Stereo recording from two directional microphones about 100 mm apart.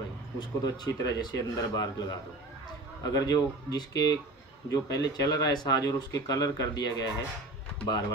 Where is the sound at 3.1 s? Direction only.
40° left (ahead or behind).